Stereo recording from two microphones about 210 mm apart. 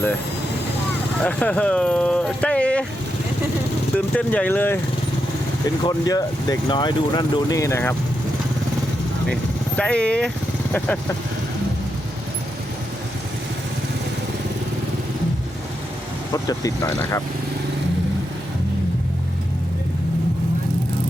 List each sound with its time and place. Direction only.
1.2 s speech: 5° left (ahead or behind)
3.9 s speech: 5° left (ahead or behind)
5.8 s speech: 15° left (ahead or behind)
9.3 s speech: 5° left (ahead or behind)
16.3 s speech: 15° left (ahead or behind)